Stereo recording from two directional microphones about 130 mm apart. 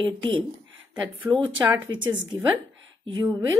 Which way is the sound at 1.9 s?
35° right (ahead or behind).